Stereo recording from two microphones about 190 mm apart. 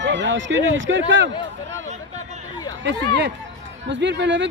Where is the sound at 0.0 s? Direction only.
70° right (ahead or behind).